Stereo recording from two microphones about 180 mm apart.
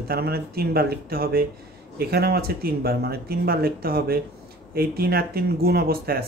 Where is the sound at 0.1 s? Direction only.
60° right (ahead or behind).